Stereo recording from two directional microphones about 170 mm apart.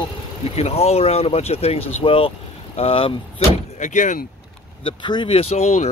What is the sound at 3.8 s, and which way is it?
Speech, 45° left (ahead or behind).